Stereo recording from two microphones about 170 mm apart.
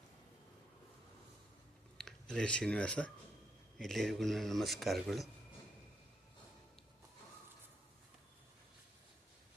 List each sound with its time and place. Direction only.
2.0 s a man's voice: 5° left (ahead or behind)